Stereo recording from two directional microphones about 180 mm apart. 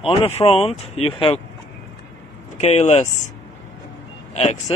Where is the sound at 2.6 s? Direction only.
40° left (ahead or behind).